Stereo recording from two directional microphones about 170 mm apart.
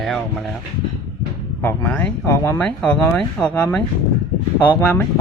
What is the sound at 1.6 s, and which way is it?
Speech, 10° left (ahead or behind).